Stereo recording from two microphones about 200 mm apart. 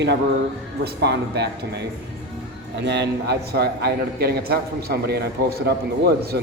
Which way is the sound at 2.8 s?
60° right (ahead or behind).